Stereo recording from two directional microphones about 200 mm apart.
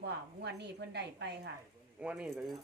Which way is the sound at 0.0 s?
60° right (ahead or behind).